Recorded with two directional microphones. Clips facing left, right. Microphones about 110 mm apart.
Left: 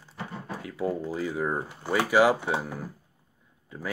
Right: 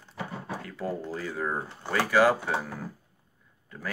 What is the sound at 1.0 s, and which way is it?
Speech, 10° left (ahead or behind).